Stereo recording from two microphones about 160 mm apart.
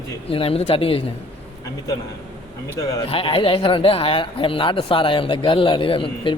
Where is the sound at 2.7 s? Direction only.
20° left (ahead or behind).